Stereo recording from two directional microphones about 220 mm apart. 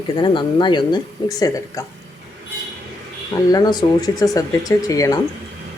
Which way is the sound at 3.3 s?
15° left (ahead or behind).